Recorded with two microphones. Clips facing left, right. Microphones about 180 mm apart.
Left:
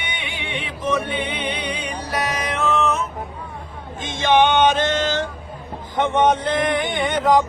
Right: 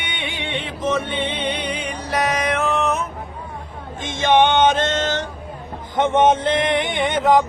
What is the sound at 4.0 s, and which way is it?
Music, 50° right (ahead or behind).